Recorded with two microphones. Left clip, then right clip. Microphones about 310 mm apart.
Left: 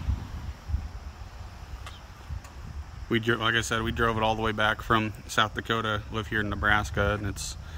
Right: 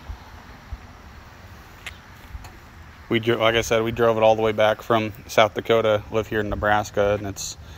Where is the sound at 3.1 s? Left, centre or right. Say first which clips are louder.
Right 6 dB; centre.